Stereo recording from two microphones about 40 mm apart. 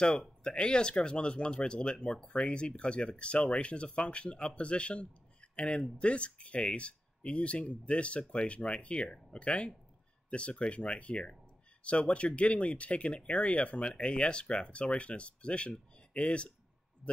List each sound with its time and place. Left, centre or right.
0.4 s speech: left